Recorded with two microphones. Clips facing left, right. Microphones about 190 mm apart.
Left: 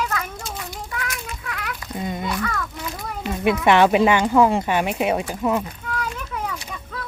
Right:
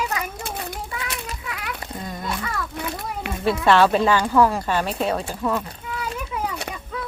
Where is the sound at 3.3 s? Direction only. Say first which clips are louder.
Left 6 dB; 60° right (ahead or behind).